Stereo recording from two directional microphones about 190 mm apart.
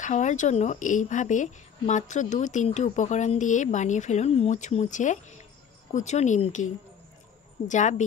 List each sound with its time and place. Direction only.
0.0 s a woman's voice: 40° left (ahead or behind)